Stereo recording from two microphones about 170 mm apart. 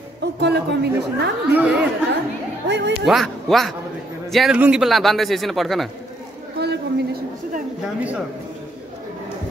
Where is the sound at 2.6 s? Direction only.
90° right.